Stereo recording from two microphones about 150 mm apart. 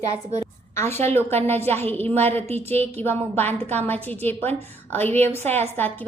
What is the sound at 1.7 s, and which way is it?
Speech, 15° left (ahead or behind).